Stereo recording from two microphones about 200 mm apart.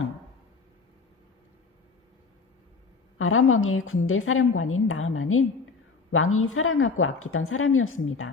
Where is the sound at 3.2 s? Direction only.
90° left.